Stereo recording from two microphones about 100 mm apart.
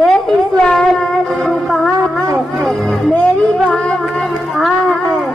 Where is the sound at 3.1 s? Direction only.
15° left (ahead or behind).